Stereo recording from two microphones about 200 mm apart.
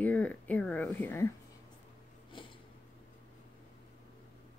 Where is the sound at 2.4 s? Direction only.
25° left (ahead or behind).